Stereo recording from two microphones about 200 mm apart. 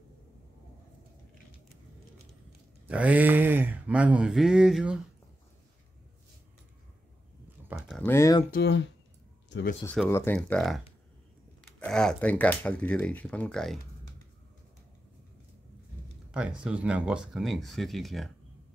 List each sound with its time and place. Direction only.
2.9 s speech: 5° right (ahead or behind)
7.6 s a sound: centre (ahead or behind)
8.0 s speech: 15° left (ahead or behind)
8.5 s speech: 55° left (ahead or behind)
9.8 s speech: 10° left (ahead or behind)
16.3 s speech: 5° right (ahead or behind)